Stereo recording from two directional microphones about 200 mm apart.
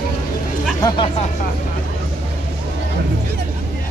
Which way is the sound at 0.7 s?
20° left (ahead or behind).